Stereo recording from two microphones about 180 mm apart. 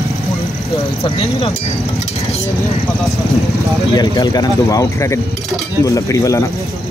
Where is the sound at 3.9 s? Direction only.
25° left (ahead or behind).